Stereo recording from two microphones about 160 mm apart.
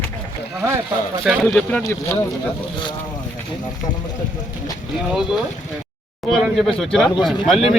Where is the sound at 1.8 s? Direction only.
20° left (ahead or behind).